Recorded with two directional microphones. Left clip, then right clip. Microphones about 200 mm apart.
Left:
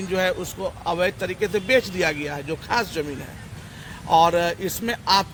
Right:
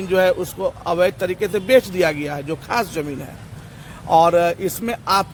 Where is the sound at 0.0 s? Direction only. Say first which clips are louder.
Right 6 dB; 55° right (ahead or behind).